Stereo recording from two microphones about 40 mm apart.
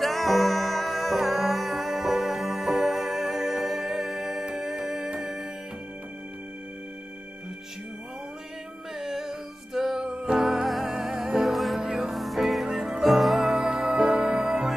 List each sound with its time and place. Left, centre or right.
0.0 s music: centre
8.9 s music: centre
11.5 s music: centre
11.8 s music: centre
12.2 s music: centre
13.4 s music: centre